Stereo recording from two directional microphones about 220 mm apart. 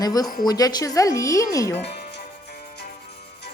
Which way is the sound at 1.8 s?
50° left (ahead or behind).